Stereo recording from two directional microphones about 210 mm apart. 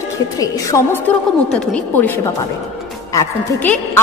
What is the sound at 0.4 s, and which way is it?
A man's voice, 15° left (ahead or behind).